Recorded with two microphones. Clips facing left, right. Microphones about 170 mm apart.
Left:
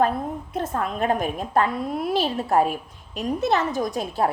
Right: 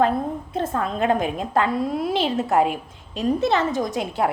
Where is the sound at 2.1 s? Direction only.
20° right (ahead or behind).